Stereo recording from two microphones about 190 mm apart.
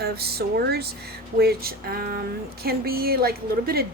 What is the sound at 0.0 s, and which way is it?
A woman's voice, 55° right (ahead or behind).